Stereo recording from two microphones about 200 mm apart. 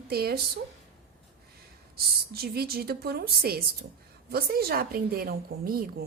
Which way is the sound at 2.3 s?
50° right (ahead or behind).